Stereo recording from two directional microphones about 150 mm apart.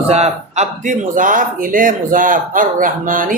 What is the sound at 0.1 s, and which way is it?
A man's voice, 45° right (ahead or behind).